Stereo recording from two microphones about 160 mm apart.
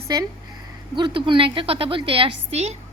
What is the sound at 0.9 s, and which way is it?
A woman's voice, 30° right (ahead or behind).